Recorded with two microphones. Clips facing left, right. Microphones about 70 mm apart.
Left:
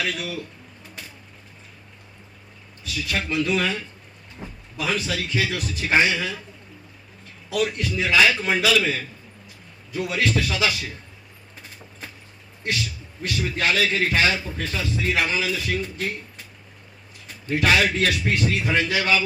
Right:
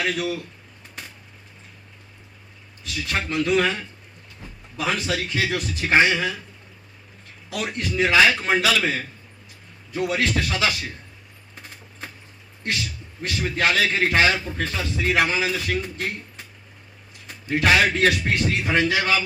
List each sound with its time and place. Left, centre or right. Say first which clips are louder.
0.0 s a man's voice: right 3 dB; right
2.8 s a man's voice: even; right
4.8 s a man's voice: right 1 dB; right
7.5 s a man's voice: left 2 dB; right
13.2 s a man's voice: right 1 dB; right
17.5 s a man's voice: right 1 dB; right